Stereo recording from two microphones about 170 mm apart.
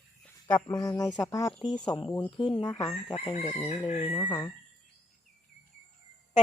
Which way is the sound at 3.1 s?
40° left (ahead or behind).